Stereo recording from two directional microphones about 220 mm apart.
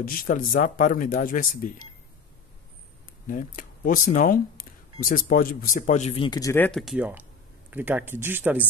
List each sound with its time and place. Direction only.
0.0 s speech: 40° left (ahead or behind)
3.3 s speech: 40° left (ahead or behind); by 6.8 s 10° left (ahead or behind)
6.8 s speech: 5° right (ahead or behind)